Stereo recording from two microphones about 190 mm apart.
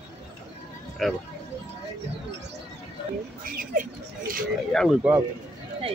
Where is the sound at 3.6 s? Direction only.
45° right (ahead or behind).